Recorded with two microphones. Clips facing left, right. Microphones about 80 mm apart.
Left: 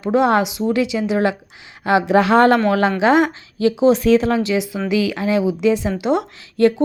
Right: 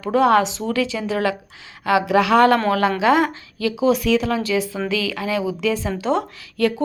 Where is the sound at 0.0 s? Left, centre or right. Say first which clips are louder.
Even; left.